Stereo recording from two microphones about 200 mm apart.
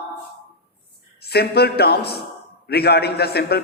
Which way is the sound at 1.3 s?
55° left (ahead or behind).